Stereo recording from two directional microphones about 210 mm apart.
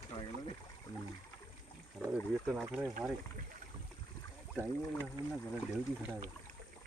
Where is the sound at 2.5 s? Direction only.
5° right (ahead or behind).